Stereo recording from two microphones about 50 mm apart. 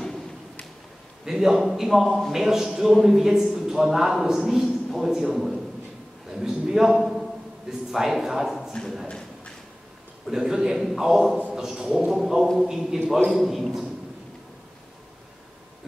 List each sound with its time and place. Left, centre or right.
1.2 s a man's voice: centre
2.0 s a man's voice: centre
2.3 s a man's voice: centre
9.0 s a sound: centre
10.2 s a man's voice: centre